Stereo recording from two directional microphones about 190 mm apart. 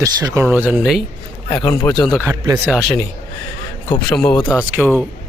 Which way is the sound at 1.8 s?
Centre (ahead or behind).